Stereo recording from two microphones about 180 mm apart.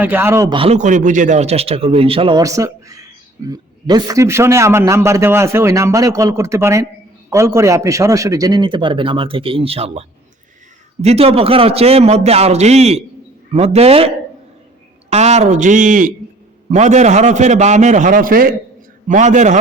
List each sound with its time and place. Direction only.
0.0 s a man's voice: 10° right (ahead or behind)
0.5 s speech: 30° right (ahead or behind)
0.8 s a man's voice: 45° right (ahead or behind)
15.1 s speech: 35° right (ahead or behind)